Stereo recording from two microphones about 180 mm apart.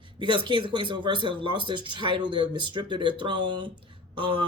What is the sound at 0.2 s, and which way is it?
Speech, 25° right (ahead or behind).